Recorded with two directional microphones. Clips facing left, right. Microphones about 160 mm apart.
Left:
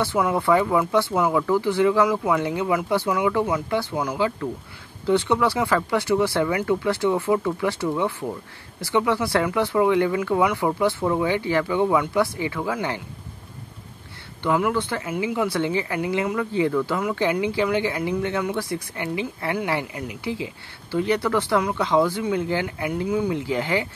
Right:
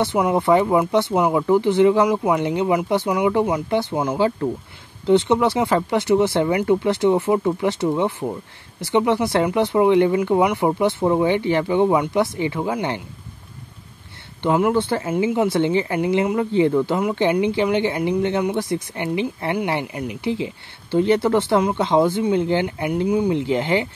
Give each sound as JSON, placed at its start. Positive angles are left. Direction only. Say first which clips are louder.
{"t": 0.0, "sound": "speech", "louder": "right 3 dB", "side_deg": -20}
{"t": 14.4, "sound": "speech", "louder": "right 4 dB", "side_deg": -25}